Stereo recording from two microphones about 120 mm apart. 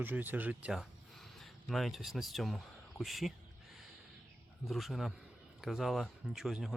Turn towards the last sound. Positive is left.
turn(degrees=-5)  # may be behind; listen again after turning